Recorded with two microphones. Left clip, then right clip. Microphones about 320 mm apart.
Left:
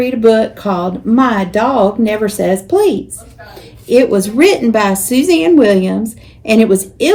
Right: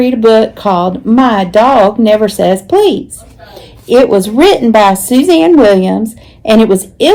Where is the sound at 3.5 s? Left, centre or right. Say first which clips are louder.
Right 3 dB; centre.